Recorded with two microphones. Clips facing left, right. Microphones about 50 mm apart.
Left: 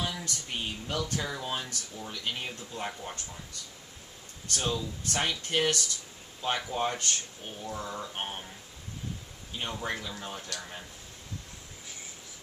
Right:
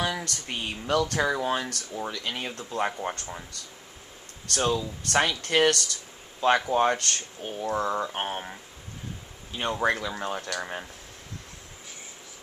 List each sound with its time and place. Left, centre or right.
0.0 s speech: right
2.0 s speech: right
4.5 s speech: right
9.7 s speech: right